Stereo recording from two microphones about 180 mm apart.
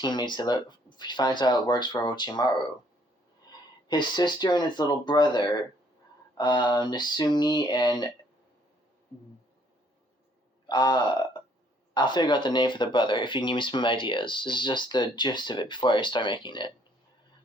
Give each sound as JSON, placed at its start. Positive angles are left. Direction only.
{"t": 0.0, "sound": "speech", "side_deg": 25}
{"t": 3.8, "sound": "speech", "side_deg": 25}
{"t": 10.7, "sound": "speech", "side_deg": 25}